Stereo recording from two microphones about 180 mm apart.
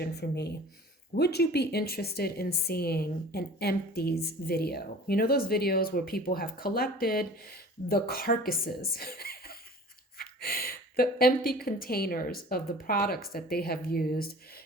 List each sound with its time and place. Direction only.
0.0 s a woman's voice: 65° left (ahead or behind)